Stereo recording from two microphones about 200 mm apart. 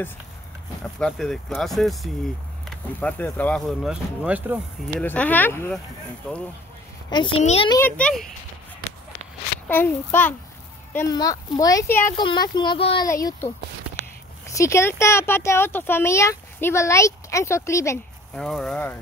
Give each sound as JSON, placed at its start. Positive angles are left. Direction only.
{"t": 0.9, "sound": "speech", "side_deg": 5}
{"t": 5.0, "sound": "speech", "side_deg": 10}
{"t": 7.1, "sound": "speech", "side_deg": 25}
{"t": 7.7, "sound": "speech", "side_deg": 10}
{"t": 9.7, "sound": "speech", "side_deg": 10}
{"t": 13.1, "sound": "speech", "side_deg": 15}
{"t": 14.5, "sound": "speech", "side_deg": 15}
{"t": 18.3, "sound": "speech", "side_deg": 0}